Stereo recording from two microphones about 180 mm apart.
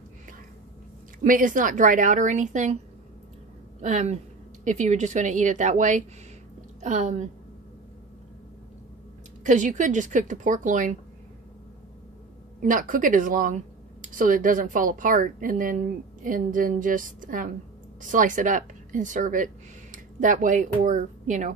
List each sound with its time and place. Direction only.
1.2 s a woman's voice: 50° right (ahead or behind)
3.8 s a woman's voice: 40° right (ahead or behind)
9.4 s a woman's voice: 45° right (ahead or behind)
12.6 s a woman's voice: 50° right (ahead or behind)